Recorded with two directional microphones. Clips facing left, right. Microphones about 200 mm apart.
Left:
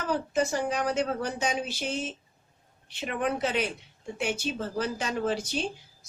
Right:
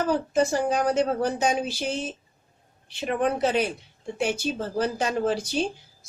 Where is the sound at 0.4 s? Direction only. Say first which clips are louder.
Right 5 dB; 30° right (ahead or behind).